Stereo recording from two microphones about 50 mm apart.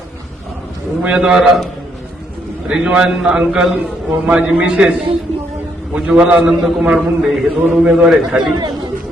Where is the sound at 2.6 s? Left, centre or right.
Right.